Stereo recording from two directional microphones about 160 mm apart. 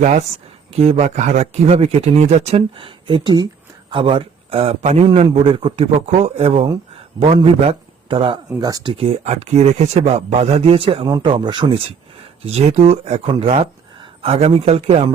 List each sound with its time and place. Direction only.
0.0 s a man's voice: 50° right (ahead or behind); by 11.8 s 30° right (ahead or behind)
12.4 s speech: 40° right (ahead or behind)